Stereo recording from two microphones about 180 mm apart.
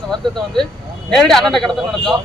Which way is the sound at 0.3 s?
Centre (ahead or behind).